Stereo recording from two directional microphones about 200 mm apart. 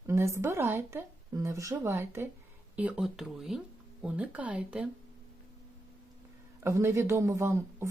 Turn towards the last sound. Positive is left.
turn(degrees=-15)  # may be behind; listen again after turning